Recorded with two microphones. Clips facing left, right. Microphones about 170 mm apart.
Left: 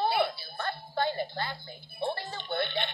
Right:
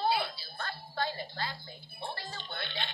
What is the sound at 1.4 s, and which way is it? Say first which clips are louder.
Speech: left 3 dB; 60° left (ahead or behind).